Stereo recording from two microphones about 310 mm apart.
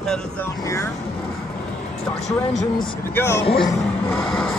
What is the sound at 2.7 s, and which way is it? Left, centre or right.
Speech, centre.